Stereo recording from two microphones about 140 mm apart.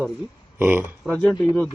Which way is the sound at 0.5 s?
15° right (ahead or behind).